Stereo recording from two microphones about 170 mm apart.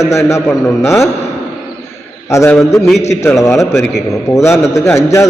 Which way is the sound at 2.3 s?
15° left (ahead or behind).